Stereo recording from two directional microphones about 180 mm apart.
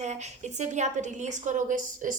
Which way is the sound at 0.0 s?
40° right (ahead or behind).